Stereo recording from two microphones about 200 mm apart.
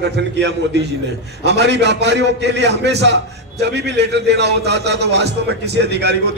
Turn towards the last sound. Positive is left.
turn(degrees=-55)  # may be behind; listen again after turning